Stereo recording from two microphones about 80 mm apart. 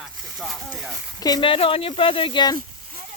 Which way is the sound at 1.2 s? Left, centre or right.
Left.